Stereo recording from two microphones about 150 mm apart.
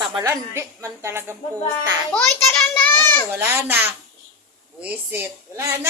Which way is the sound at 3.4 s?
15° right (ahead or behind).